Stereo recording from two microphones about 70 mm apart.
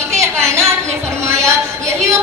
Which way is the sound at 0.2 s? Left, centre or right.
Centre.